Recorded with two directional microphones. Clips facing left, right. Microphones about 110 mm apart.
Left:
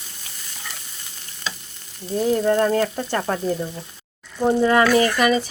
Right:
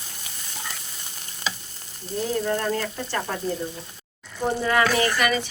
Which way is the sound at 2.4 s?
40° left (ahead or behind).